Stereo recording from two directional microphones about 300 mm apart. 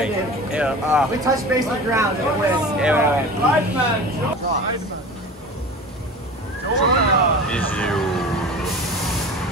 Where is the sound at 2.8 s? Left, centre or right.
Centre.